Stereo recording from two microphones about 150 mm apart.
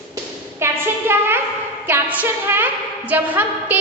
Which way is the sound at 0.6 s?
15° right (ahead or behind).